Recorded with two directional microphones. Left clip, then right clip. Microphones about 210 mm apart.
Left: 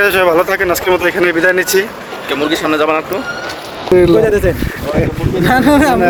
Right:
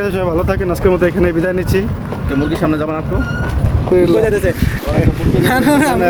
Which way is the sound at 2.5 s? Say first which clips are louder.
Left 6 dB; 20° left (ahead or behind).